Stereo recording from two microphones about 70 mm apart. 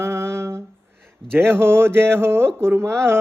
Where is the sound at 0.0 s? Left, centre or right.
Right.